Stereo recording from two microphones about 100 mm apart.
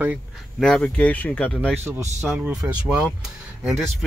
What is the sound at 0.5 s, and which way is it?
Speech, 5° left (ahead or behind).